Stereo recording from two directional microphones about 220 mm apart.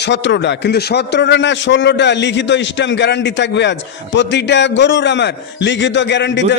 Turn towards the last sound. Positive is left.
turn(degrees=55)  # may be behind; listen again after turning